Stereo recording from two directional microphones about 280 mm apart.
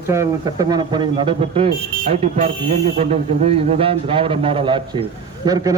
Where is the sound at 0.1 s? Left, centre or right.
Centre.